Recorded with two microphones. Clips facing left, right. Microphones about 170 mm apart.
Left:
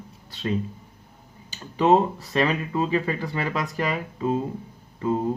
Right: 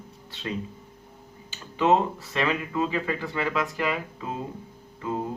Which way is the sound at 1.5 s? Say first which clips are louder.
Left 3 dB; 35° left (ahead or behind).